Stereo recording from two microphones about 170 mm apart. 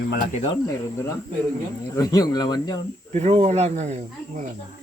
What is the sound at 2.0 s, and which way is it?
Speech, 20° left (ahead or behind).